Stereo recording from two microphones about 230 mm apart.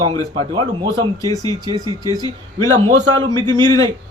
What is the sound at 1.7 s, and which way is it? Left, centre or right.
A man's voice, centre.